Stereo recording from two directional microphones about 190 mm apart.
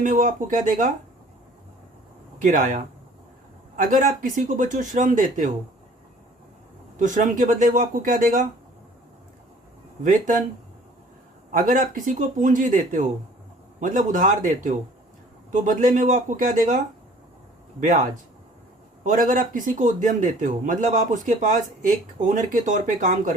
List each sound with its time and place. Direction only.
0.0 s a man's voice: 45° right (ahead or behind)
2.4 s a man's voice: 45° right (ahead or behind)
6.9 s a man's voice: 40° right (ahead or behind)
10.0 s a man's voice: 40° right (ahead or behind)
11.5 s a man's voice: 45° right (ahead or behind)